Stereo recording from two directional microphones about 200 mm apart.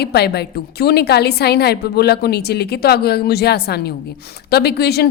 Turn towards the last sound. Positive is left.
turn(degrees=55)  # may be behind; listen again after turning